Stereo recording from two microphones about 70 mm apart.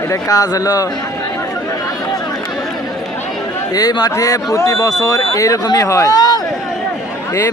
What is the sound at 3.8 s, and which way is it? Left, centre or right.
Speech, left.